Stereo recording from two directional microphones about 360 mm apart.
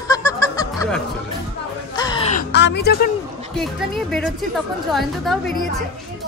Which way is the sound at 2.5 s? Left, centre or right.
Left.